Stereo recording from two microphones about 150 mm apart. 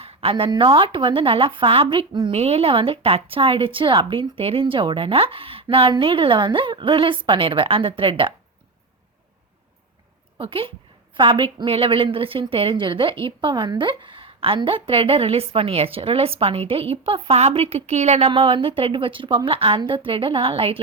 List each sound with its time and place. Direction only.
0.0 s a woman's voice: 40° right (ahead or behind)
10.3 s a woman's voice: 35° right (ahead or behind)
18.3 s a woman's voice: 35° right (ahead or behind)